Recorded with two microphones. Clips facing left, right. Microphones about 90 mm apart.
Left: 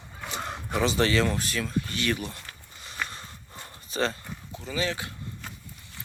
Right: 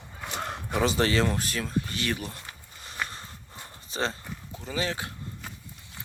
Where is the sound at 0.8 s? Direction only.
35° right (ahead or behind).